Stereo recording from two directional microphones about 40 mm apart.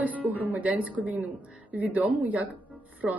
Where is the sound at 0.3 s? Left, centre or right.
Right.